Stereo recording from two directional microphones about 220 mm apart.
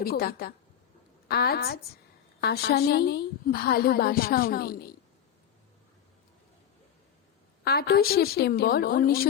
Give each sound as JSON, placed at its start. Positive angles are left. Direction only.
{"t": 0.0, "sound": "a woman's voice", "side_deg": 45}
{"t": 7.6, "sound": "a woman's voice", "side_deg": 45}